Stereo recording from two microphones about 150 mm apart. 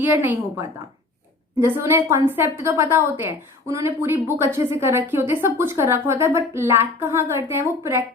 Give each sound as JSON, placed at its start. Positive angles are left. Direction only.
{"t": 0.0, "sound": "a woman's voice", "side_deg": -15}